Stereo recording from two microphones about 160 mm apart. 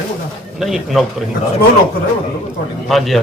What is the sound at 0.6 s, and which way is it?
Speech, centre (ahead or behind).